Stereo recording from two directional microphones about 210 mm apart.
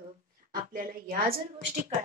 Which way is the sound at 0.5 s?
40° right (ahead or behind).